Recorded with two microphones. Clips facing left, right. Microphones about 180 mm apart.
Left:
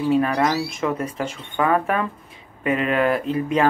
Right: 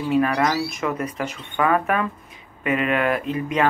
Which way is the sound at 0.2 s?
30° left (ahead or behind).